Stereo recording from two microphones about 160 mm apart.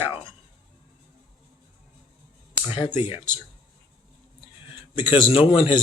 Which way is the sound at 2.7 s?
35° left (ahead or behind).